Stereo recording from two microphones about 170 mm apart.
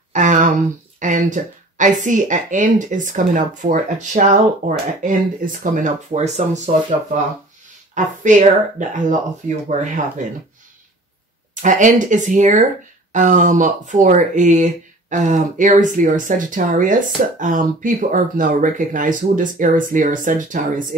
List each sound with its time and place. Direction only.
0.1 s a sound: 45° right (ahead or behind)
0.9 s speech: 50° right (ahead or behind)
7.9 s speech: 45° right (ahead or behind)
11.6 s speech: 50° right (ahead or behind)